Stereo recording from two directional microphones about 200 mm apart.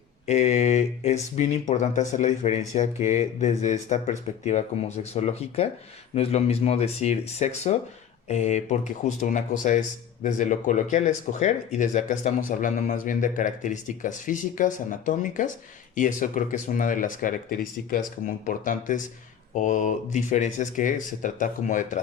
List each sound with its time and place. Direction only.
0.3 s speech: 35° left (ahead or behind)